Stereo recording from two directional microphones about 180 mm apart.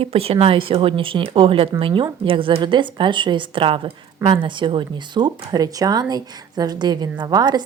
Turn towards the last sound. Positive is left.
turn(degrees=-25)  # may be behind; listen again after turning